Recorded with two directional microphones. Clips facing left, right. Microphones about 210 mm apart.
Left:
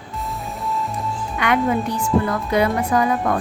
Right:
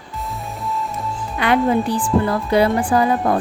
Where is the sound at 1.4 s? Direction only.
30° right (ahead or behind).